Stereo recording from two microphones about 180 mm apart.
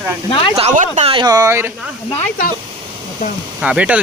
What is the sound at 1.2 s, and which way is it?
Speech, 20° right (ahead or behind).